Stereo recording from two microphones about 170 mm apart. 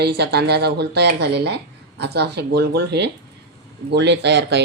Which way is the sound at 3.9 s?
85° right.